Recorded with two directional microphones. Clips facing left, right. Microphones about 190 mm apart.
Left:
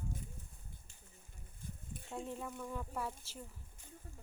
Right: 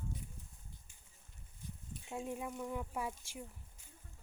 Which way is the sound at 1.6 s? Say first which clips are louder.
Left 1 dB; 50° left (ahead or behind).